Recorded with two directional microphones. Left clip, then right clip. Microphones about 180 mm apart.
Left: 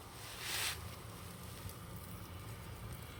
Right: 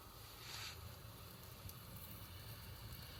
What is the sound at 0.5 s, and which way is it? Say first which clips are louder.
Boat: left 11 dB; 55° left (ahead or behind).